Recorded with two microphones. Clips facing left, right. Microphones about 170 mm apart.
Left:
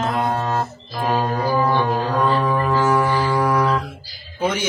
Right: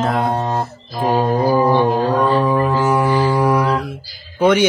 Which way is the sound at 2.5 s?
15° right (ahead or behind).